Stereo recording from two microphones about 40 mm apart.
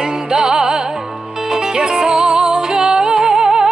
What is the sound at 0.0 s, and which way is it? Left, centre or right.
Music, centre.